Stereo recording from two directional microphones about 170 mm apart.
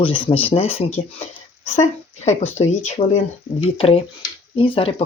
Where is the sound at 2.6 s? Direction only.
30° left (ahead or behind).